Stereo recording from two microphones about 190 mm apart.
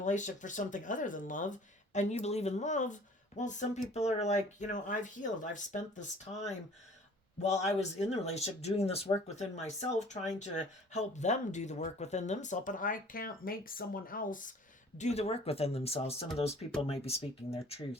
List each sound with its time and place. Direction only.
0.0 s speech: 40° left (ahead or behind)